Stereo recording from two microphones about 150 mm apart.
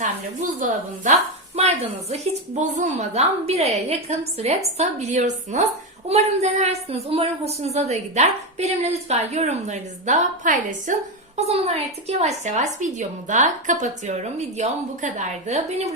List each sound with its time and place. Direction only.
0.0 s a woman's voice: 60° right (ahead or behind)
1.5 s a woman's voice: 45° right (ahead or behind)
11.3 s a woman's voice: 45° right (ahead or behind)